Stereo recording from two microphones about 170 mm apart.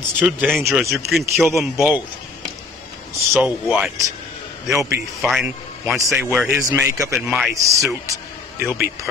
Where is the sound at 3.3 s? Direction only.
5° right (ahead or behind).